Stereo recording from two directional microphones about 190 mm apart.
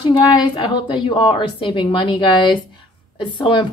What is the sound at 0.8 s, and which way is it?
A woman's voice, 25° left (ahead or behind).